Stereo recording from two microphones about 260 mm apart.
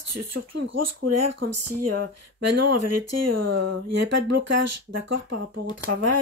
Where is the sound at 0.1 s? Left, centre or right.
Right.